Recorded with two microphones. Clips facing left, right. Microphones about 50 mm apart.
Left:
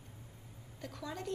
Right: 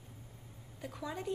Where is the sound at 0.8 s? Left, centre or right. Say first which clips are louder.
Right 2 dB; centre.